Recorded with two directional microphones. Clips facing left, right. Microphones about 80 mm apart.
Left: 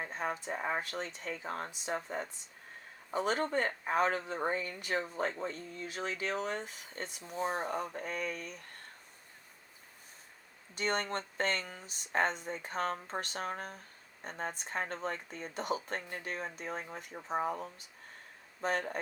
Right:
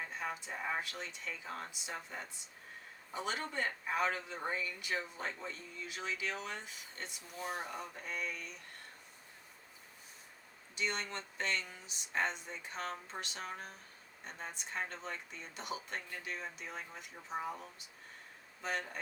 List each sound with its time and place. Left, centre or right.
0.0 s speech: left
3.1 s speech: left
10.8 s speech: left